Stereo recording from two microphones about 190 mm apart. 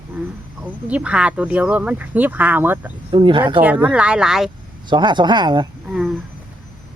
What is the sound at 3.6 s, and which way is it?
Speech, 10° right (ahead or behind).